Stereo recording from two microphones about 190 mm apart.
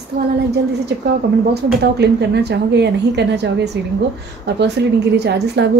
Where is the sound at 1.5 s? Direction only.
60° right (ahead or behind).